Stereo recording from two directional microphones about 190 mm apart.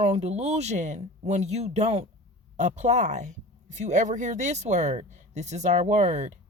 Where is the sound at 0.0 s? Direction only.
35° right (ahead or behind).